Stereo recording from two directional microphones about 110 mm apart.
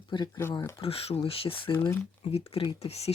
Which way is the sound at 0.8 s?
60° left (ahead or behind).